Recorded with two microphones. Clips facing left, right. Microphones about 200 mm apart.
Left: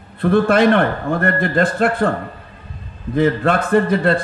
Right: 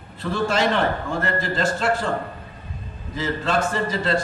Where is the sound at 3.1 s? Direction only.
55° left (ahead or behind).